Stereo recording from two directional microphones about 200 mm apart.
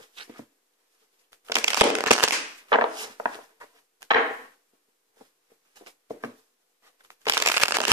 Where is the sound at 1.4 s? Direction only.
15° right (ahead or behind).